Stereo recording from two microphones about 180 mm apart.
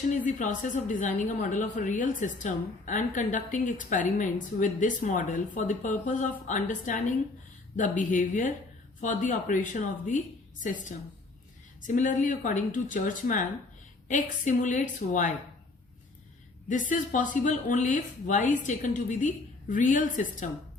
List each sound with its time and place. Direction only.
0.1 s a woman's voice: 45° left (ahead or behind)
16.9 s a woman's voice: 45° left (ahead or behind)